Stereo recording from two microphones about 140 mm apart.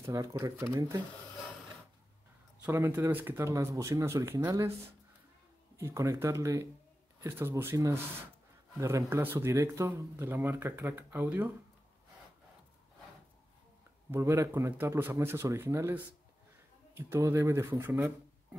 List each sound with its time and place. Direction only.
0.0 s speech: 20° right (ahead or behind)
2.6 s speech: 15° right (ahead or behind)
5.8 s speech: 20° right (ahead or behind)
14.1 s speech: 20° right (ahead or behind)